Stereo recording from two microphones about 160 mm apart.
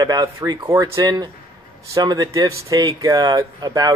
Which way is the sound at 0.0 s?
25° right (ahead or behind).